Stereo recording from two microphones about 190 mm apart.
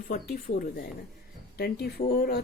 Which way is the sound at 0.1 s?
50° left (ahead or behind).